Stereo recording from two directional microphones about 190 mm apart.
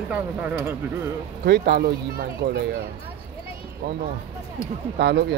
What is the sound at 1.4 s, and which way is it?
Speech, 55° right (ahead or behind).